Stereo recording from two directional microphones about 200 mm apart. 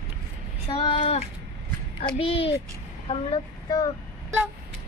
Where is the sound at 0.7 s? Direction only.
25° left (ahead or behind).